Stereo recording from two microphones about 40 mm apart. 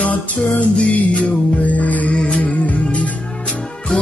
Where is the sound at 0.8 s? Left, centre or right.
Left.